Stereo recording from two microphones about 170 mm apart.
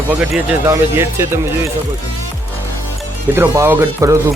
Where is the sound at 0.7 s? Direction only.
15° right (ahead or behind).